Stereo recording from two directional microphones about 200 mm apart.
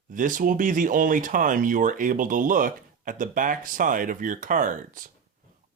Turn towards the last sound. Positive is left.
turn(degrees=-40)  # may be behind; listen again after turning